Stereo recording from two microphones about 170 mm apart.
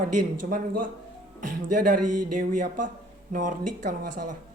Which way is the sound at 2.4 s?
50° right (ahead or behind).